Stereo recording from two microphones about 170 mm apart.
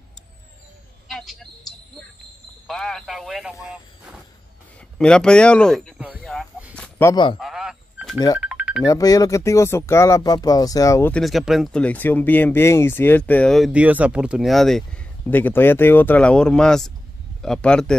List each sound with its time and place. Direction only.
1.0 s bird: centre (ahead or behind)
2.6 s speech: 5° left (ahead or behind)
4.9 s speech: 5° left (ahead or behind)
6.7 s chicken: 5° left (ahead or behind)
7.1 s speech: 25° left (ahead or behind)
7.3 s telephone dialing: centre (ahead or behind)
8.4 s music: 5° right (ahead or behind)
8.8 s speech: 20° left (ahead or behind)
11.2 s a man's voice: centre (ahead or behind)